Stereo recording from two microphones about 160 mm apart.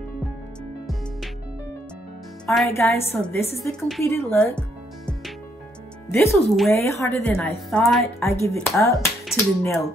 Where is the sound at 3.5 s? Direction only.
Centre (ahead or behind).